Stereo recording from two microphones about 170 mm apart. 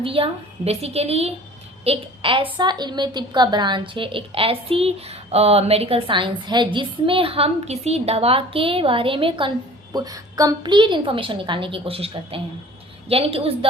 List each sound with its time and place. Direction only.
0.0 s a woman's voice: 35° right (ahead or behind)